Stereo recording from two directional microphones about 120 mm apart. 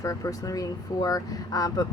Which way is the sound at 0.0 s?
30° left (ahead or behind).